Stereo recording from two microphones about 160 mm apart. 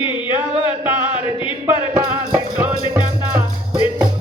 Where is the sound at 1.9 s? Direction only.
15° right (ahead or behind).